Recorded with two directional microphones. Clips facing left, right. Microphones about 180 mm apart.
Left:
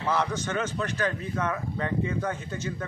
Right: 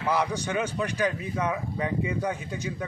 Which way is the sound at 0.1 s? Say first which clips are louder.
Right 1 dB; 15° right (ahead or behind).